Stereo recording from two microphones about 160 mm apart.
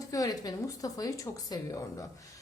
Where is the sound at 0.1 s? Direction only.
25° left (ahead or behind).